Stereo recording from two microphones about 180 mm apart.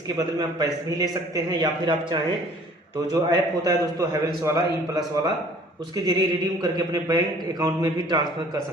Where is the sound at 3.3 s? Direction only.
20° right (ahead or behind).